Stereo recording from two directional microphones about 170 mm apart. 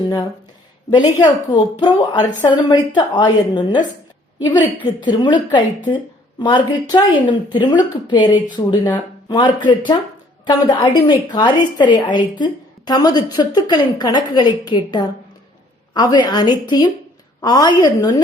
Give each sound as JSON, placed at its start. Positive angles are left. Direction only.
{"t": 0.9, "sound": "a woman's voice", "side_deg": 25}